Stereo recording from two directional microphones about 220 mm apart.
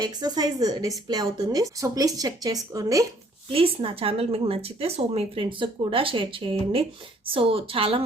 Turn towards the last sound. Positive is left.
turn(degrees=-25)  # may be behind; listen again after turning